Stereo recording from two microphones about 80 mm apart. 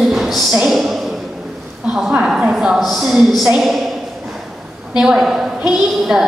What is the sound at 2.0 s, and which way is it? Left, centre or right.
A woman's voice, centre.